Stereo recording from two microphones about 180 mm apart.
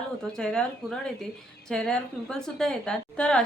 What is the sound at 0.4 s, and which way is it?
Speech, 5° left (ahead or behind).